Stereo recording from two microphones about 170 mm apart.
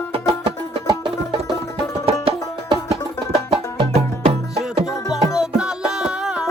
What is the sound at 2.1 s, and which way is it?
Music, 35° right (ahead or behind).